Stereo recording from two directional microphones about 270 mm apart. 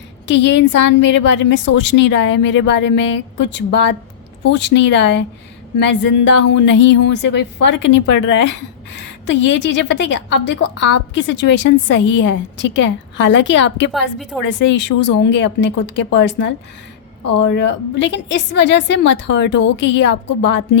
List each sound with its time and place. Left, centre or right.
0.3 s a woman's voice: left
14.2 s a woman's voice: centre
14.4 s a woman's voice: left